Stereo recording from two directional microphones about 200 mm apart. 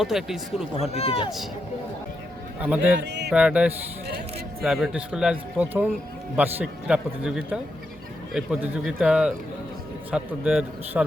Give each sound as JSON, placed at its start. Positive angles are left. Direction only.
{"t": 0.0, "sound": "speech", "side_deg": 0}
{"t": 0.8, "sound": "speech", "side_deg": 30}
{"t": 2.6, "sound": "a man's voice", "side_deg": -5}
{"t": 3.0, "sound": "music", "side_deg": -60}
{"t": 3.2, "sound": "speech", "side_deg": -5}